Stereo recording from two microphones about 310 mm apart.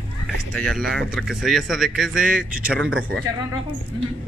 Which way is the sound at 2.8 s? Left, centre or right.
Right.